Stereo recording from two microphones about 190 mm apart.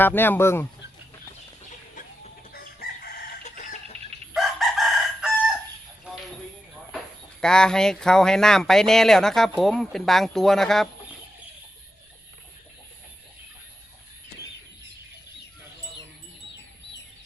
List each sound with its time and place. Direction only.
0.0 s speech: 10° left (ahead or behind)
1.7 s chicken: 40° left (ahead or behind)
2.5 s crowing: 50° left (ahead or behind)
3.4 s chicken: 40° left (ahead or behind)
4.4 s chicken: centre (ahead or behind)
7.4 s speech: 5° left (ahead or behind)